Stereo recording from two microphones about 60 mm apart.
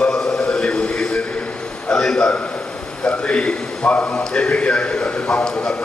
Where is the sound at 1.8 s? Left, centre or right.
Centre.